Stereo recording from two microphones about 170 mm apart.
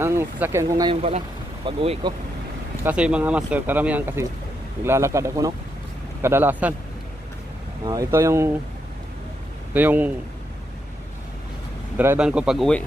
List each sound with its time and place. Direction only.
0.0 s speech: 15° right (ahead or behind)
1.0 s speech: 35° right (ahead or behind)
2.8 s speech: 5° right (ahead or behind)
7.8 s speech: 20° right (ahead or behind)
9.8 s speech: 10° right (ahead or behind)
12.0 s a man's voice: 10° right (ahead or behind)